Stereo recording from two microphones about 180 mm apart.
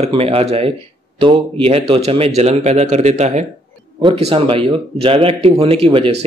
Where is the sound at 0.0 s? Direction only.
30° right (ahead or behind).